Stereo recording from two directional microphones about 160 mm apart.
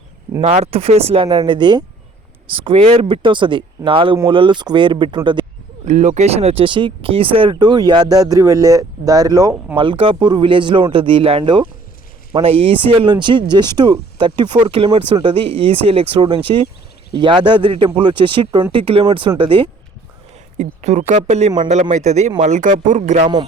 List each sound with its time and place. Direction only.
0.4 s speech: 40° right (ahead or behind)
5.8 s speech: 50° right (ahead or behind); by 19.7 s 30° right (ahead or behind)
20.6 s speech: 45° right (ahead or behind)